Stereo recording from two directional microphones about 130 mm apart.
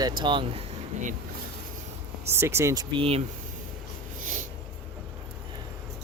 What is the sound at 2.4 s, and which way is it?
Speech, 20° right (ahead or behind).